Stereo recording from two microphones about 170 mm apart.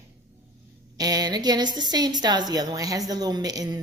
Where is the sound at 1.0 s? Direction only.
20° right (ahead or behind).